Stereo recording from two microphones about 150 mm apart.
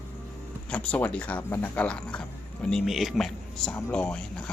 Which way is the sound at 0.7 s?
10° left (ahead or behind).